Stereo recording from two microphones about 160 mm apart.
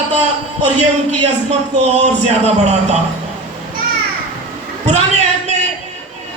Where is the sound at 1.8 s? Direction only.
45° right (ahead or behind).